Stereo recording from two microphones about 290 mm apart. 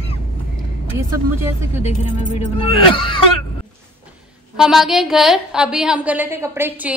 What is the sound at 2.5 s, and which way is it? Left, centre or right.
Speech, centre.